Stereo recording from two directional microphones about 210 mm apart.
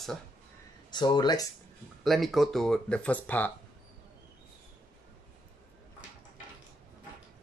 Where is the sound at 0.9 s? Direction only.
20° left (ahead or behind).